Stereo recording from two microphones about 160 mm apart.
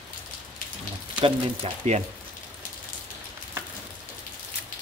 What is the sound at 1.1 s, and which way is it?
Speech, 35° right (ahead or behind).